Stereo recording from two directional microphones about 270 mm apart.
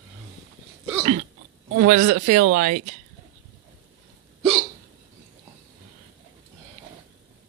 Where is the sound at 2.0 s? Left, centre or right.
Right.